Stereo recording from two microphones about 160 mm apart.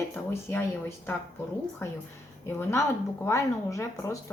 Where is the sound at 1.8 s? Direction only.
15° left (ahead or behind).